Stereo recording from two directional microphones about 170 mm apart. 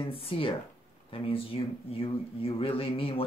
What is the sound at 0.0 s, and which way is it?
Speech, 35° left (ahead or behind).